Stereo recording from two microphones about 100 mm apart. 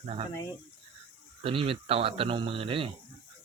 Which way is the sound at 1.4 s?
65° right (ahead or behind).